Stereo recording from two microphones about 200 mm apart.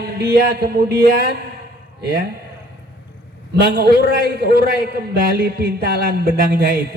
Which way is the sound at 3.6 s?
50° right (ahead or behind).